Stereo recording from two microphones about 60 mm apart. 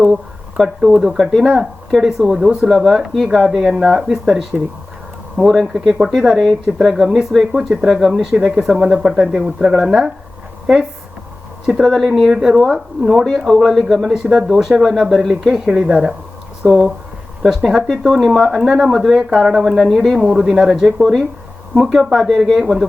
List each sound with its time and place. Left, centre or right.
0.0 s speech: centre
11.8 s speech: centre
13.5 s speech: centre
15.8 s speech: centre
16.6 s speech: centre
19.3 s speech: centre
19.7 s speech: centre
20.1 s speech: centre